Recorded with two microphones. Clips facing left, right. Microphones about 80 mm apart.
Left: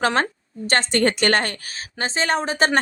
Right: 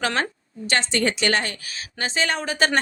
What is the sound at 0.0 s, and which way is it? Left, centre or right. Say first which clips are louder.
A woman's voice: left 4 dB; left.